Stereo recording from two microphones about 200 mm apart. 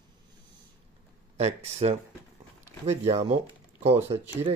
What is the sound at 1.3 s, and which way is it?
Speech, 35° right (ahead or behind).